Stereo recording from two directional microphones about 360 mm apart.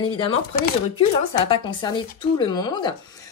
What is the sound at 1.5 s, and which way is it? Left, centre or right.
Speech, centre.